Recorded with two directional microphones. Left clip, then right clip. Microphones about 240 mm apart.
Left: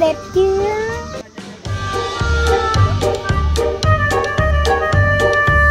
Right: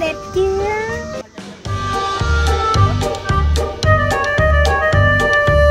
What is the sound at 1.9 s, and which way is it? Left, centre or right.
Music, centre.